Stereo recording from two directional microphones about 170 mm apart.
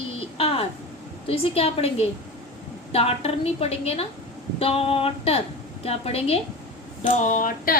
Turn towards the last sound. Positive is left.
turn(degrees=55)  # may be behind; listen again after turning